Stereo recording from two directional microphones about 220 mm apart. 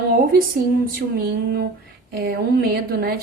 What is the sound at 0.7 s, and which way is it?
A woman's voice, 45° right (ahead or behind).